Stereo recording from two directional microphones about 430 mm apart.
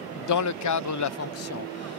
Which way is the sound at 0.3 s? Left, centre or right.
Left.